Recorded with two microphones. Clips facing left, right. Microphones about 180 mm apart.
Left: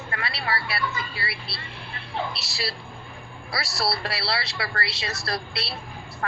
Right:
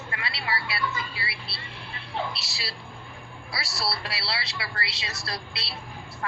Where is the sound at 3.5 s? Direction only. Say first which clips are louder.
Left 4 dB; 50° left (ahead or behind).